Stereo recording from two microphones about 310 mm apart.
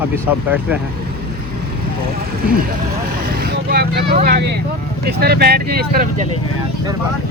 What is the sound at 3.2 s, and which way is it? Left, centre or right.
Speech, right.